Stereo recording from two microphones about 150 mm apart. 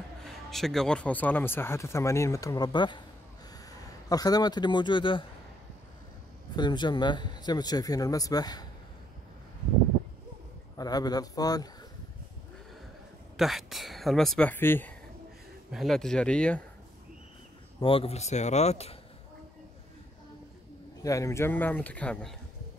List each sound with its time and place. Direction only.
0.2 s speech: centre (ahead or behind); by 3.0 s 30° left (ahead or behind)
4.1 s speech: 25° left (ahead or behind)
6.5 s speech: 30° left (ahead or behind)
10.8 s speech: 25° left (ahead or behind)
13.4 s speech: centre (ahead or behind)
15.7 s speech: centre (ahead or behind)
17.7 s speech: 40° left (ahead or behind)
21.0 s speech: 20° left (ahead or behind)